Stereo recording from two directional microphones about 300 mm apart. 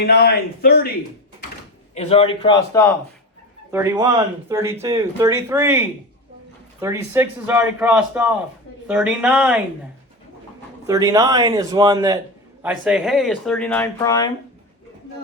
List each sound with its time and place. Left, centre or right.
0.0 s speech: left
2.0 s a man's voice: centre
3.7 s speech: centre
10.8 s speech: centre